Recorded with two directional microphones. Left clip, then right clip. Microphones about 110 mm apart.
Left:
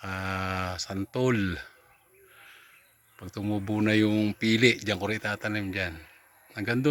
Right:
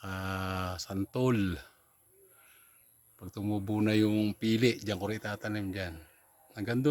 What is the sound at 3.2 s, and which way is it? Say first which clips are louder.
Speech: left 3 dB; 5° left (ahead or behind).